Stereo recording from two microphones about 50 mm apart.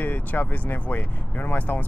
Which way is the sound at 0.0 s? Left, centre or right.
Left.